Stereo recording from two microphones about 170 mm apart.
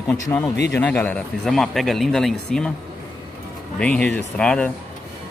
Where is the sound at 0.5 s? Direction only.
85° left.